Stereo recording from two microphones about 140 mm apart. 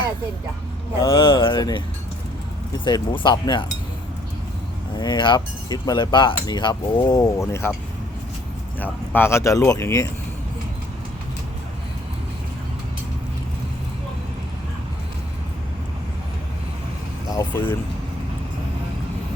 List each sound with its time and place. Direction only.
1.1 s speech: 35° left (ahead or behind)
2.8 s speech: 30° left (ahead or behind)
4.9 s speech: 35° left (ahead or behind)
8.8 s speech: 15° left (ahead or behind)
17.3 s speech: 15° left (ahead or behind)